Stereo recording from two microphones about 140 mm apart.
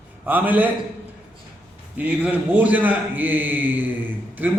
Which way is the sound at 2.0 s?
10° right (ahead or behind).